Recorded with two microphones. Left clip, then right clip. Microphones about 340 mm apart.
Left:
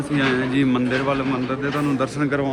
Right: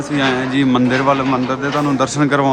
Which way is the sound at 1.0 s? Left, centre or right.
Right.